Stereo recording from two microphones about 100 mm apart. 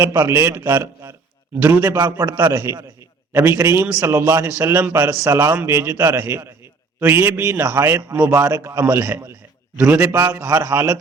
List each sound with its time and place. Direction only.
0.0 s a man's voice: 30° right (ahead or behind)
2.5 s a man's voice: 30° right (ahead or behind)
5.2 s a man's voice: 30° right (ahead or behind)
9.7 s a man's voice: 15° right (ahead or behind)
10.4 s a man's voice: 30° right (ahead or behind)